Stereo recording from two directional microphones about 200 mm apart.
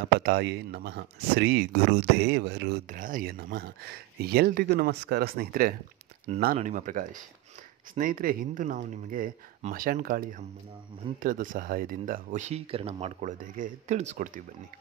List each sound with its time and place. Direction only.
0.2 s speech: 55° right (ahead or behind)